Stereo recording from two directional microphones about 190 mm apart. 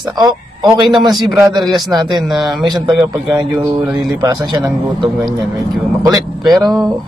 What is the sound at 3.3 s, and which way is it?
Speech, 20° right (ahead or behind).